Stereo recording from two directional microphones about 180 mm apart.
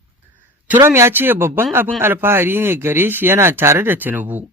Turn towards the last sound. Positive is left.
turn(degrees=-10)  # may be behind; listen again after turning